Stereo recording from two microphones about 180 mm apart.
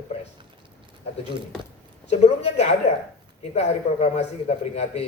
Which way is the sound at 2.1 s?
40° left (ahead or behind).